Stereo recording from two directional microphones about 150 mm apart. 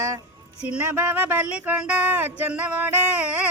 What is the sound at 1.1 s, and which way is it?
Speech, 10° right (ahead or behind).